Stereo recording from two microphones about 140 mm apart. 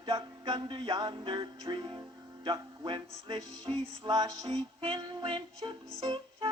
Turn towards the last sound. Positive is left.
turn(degrees=-35)  # may be behind; listen again after turning